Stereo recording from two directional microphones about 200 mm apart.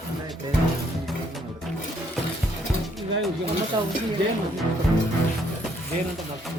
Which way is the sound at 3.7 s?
25° right (ahead or behind).